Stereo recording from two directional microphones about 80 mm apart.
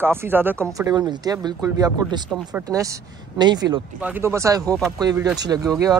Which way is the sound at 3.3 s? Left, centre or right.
Right.